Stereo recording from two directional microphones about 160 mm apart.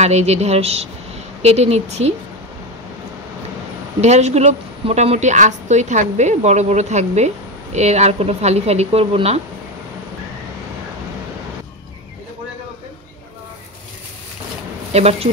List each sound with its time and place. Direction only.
0.0 s a woman's voice: 40° right (ahead or behind)
4.0 s a woman's voice: 45° right (ahead or behind)
14.9 s speech: 40° right (ahead or behind)